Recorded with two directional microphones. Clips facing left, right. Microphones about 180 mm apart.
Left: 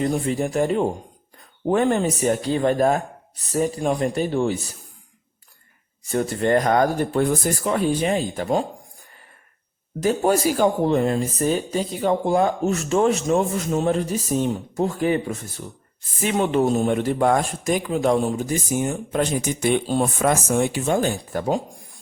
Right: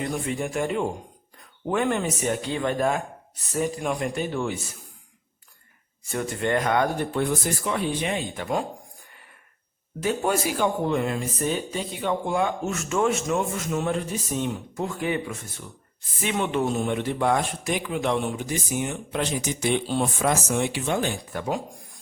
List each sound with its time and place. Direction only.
0.0 s speech: 35° left (ahead or behind)
6.1 s speech: 35° left (ahead or behind)
10.0 s speech: 40° left (ahead or behind)